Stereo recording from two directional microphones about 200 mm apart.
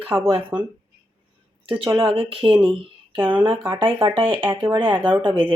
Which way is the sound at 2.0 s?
25° right (ahead or behind).